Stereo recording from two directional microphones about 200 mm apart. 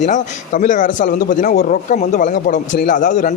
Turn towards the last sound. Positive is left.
turn(degrees=40)  # may be behind; listen again after turning